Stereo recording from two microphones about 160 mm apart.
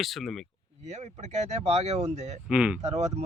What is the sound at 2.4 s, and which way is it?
Speech, 5° right (ahead or behind).